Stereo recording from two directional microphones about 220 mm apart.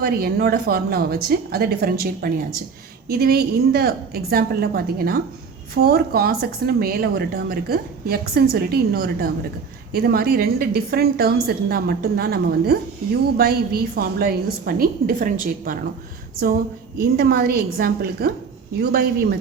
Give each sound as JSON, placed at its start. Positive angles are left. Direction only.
{"t": 0.0, "sound": "a woman's voice", "side_deg": -45}
{"t": 17.0, "sound": "a woman's voice", "side_deg": -45}